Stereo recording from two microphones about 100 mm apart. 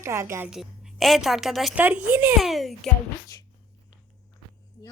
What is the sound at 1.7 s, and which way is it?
Speech, 15° right (ahead or behind).